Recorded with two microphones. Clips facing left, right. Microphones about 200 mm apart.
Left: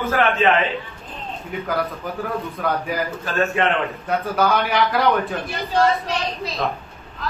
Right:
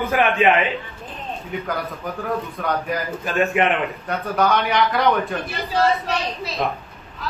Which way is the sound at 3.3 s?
15° right (ahead or behind).